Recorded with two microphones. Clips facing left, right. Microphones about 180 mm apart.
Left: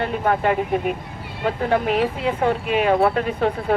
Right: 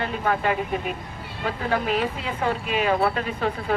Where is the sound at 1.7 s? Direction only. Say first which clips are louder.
Left 4 dB; 55° left (ahead or behind).